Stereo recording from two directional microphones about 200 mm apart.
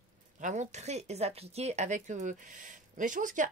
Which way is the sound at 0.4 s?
35° right (ahead or behind).